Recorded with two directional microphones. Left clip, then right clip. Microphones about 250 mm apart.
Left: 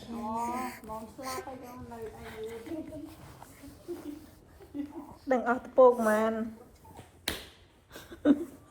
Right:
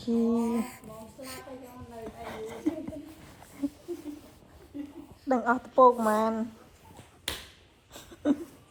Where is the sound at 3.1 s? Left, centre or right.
Centre.